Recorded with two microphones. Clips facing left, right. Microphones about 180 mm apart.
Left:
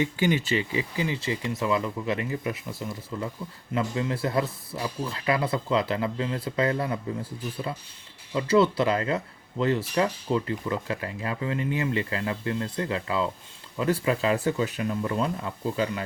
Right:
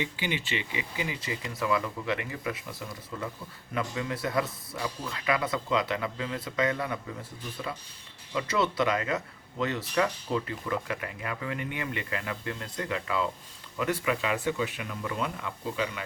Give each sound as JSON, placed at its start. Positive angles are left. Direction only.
{"t": 0.0, "sound": "speech", "side_deg": 45}